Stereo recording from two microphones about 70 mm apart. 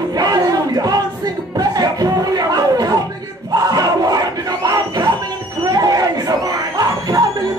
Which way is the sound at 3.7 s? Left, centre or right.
Right.